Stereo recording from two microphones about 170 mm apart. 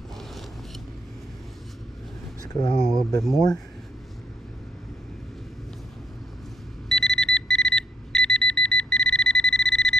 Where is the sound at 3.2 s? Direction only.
Centre (ahead or behind).